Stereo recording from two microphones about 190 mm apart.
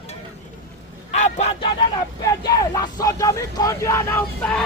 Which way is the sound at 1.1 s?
40° left (ahead or behind).